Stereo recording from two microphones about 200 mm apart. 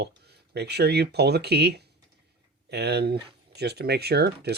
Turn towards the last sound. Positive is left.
turn(degrees=-55)  # may be behind; listen again after turning